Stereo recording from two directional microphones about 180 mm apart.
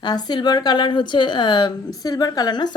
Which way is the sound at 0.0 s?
25° left (ahead or behind).